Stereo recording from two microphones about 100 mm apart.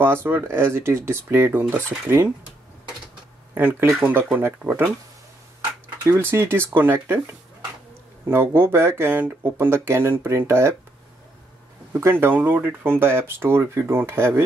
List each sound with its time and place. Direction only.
0.0 s speech: 20° right (ahead or behind)
4.0 s speech: 20° right (ahead or behind)
6.3 s speech: 25° right (ahead or behind)
8.3 s speech: 25° right (ahead or behind)
11.9 s speech: 20° right (ahead or behind)